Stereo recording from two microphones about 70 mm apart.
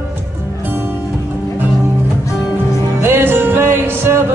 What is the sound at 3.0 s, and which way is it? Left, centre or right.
Music, right.